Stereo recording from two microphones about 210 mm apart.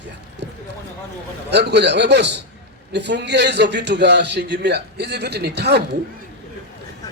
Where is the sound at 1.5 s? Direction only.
55° right (ahead or behind).